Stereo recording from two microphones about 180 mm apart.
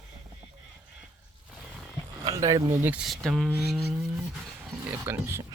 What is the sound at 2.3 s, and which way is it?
Speech, 20° right (ahead or behind).